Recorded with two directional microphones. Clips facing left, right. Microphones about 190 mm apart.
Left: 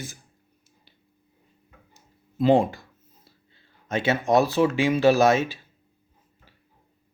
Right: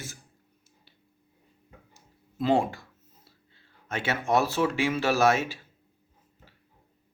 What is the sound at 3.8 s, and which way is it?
Speech, 20° left (ahead or behind).